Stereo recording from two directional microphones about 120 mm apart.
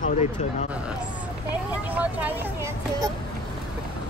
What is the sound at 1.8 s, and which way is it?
Speech, 15° right (ahead or behind).